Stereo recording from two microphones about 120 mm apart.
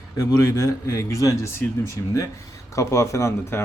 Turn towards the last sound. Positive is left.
turn(degrees=25)  # may be behind; listen again after turning